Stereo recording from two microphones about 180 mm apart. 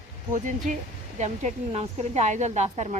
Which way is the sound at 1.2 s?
40° right (ahead or behind).